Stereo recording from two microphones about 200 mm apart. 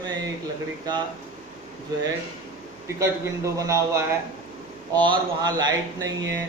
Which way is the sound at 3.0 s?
15° right (ahead or behind).